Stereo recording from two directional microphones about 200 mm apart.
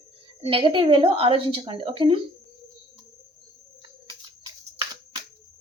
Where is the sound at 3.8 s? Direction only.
25° right (ahead or behind).